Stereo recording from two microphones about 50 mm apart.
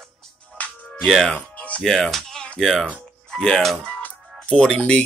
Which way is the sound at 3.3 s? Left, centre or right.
Centre.